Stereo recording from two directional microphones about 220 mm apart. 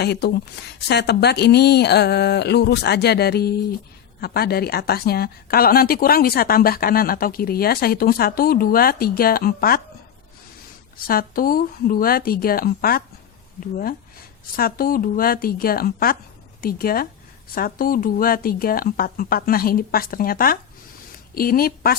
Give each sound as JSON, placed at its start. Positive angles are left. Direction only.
{"t": 0.0, "sound": "a woman's voice", "side_deg": 50}
{"t": 11.0, "sound": "speech", "side_deg": 40}
{"t": 14.5, "sound": "speech", "side_deg": 40}